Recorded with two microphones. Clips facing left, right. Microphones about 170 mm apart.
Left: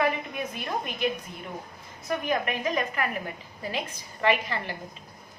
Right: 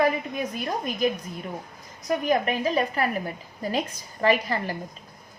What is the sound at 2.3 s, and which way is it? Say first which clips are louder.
A woman's voice: right 4 dB; 35° right (ahead or behind).